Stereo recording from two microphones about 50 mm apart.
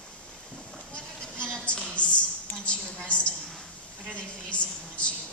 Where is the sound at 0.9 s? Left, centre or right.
Left.